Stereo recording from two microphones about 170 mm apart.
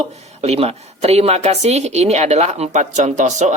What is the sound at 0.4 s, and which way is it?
Speech, 35° right (ahead or behind).